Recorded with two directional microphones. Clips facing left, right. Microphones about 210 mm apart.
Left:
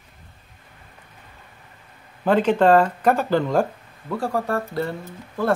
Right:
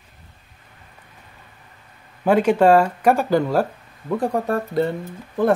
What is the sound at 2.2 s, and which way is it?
Speech, 10° right (ahead or behind).